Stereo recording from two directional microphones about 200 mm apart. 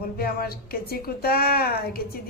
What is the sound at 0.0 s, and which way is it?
A woman's voice, 50° left (ahead or behind).